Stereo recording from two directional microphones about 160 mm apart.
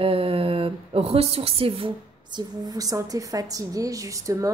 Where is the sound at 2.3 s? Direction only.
20° right (ahead or behind).